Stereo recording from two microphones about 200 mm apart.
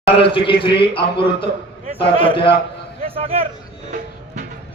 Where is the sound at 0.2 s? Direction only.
25° left (ahead or behind).